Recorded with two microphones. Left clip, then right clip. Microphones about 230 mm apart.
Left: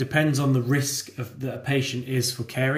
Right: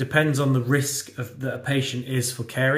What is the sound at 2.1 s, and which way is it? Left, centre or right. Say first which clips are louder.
Speech: left 1 dB; centre.